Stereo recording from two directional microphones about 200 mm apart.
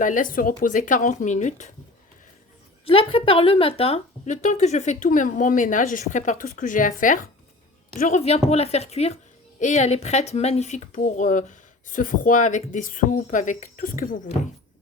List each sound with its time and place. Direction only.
0.0 s speech: 40° left (ahead or behind)
2.8 s speech: 25° left (ahead or behind)